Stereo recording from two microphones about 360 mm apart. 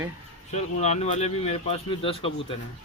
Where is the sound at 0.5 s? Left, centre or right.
Centre.